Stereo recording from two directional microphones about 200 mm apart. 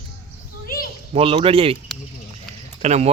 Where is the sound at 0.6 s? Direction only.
50° left (ahead or behind).